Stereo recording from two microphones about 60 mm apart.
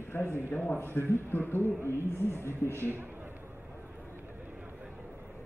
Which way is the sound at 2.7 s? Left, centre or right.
Right.